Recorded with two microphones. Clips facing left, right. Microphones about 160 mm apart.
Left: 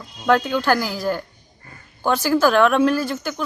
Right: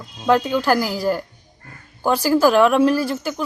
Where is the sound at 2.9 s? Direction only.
35° right (ahead or behind).